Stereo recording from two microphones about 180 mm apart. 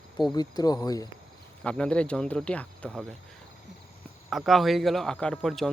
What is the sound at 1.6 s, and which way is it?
A man's voice, 5° left (ahead or behind).